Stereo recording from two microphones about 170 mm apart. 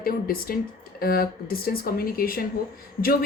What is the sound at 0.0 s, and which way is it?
A woman's voice, 60° left (ahead or behind).